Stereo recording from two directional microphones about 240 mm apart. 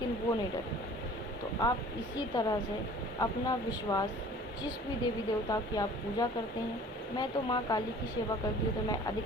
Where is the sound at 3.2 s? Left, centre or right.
Centre.